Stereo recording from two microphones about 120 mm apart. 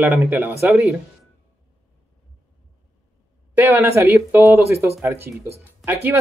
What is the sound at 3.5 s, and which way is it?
Speech, 15° right (ahead or behind).